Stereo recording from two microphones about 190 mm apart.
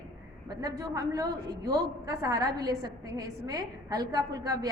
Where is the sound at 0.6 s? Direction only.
20° right (ahead or behind).